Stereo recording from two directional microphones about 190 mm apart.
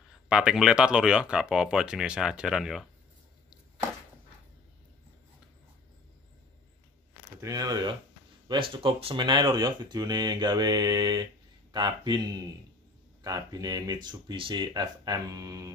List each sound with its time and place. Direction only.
0.3 s speech: 5° right (ahead or behind)
7.3 s speech: 20° right (ahead or behind)